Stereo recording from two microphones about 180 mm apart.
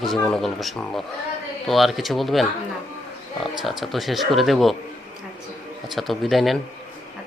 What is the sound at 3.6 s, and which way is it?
Speech, centre (ahead or behind).